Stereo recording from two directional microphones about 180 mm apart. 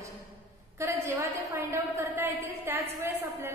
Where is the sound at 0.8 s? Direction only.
15° right (ahead or behind).